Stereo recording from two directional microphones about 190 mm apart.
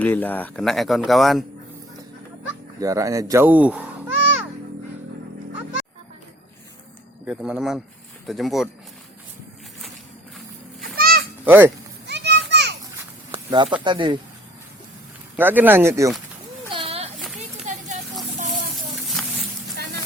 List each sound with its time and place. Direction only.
0.0 s speech: 10° left (ahead or behind)
2.8 s speech: 15° right (ahead or behind)
7.3 s speech: 5° right (ahead or behind)
10.9 s goat: 50° right (ahead or behind)
11.4 s speech: 10° right (ahead or behind)
12.0 s children playing: 65° right (ahead or behind)
13.3 s snake: 25° right (ahead or behind)
13.8 s speech: 25° right (ahead or behind)
15.4 s speech: 10° right (ahead or behind)
16.6 s a sound: 30° right (ahead or behind)
18.9 s a sound: centre (ahead or behind)